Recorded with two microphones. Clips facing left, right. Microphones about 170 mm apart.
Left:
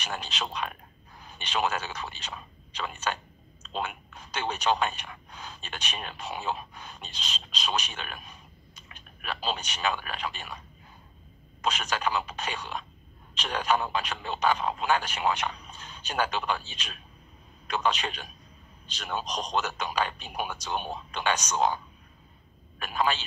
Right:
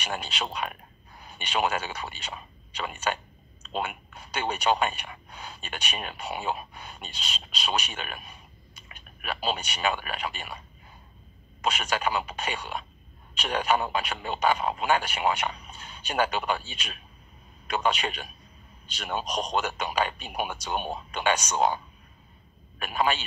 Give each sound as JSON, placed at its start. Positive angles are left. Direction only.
{"t": 0.0, "sound": "speech", "side_deg": -10}
{"t": 11.6, "sound": "speech", "side_deg": -10}